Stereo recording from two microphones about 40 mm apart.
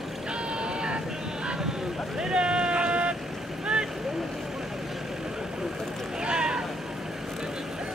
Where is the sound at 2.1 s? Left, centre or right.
Right.